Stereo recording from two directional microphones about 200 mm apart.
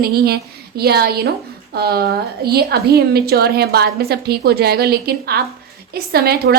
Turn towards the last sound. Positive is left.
turn(degrees=-50)  # may be behind; listen again after turning